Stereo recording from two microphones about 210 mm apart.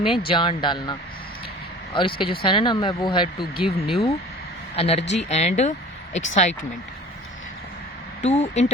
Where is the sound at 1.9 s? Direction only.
25° left (ahead or behind).